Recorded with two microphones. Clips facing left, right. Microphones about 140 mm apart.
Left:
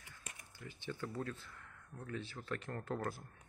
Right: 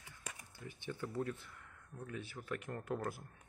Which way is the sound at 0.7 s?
15° right (ahead or behind).